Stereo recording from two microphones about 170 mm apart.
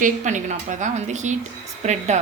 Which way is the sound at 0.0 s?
45° right (ahead or behind).